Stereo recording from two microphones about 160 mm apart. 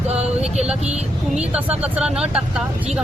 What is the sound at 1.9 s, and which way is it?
Speech, 5° right (ahead or behind).